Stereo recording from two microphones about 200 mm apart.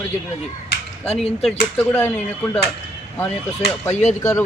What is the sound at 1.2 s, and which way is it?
Speech, centre (ahead or behind).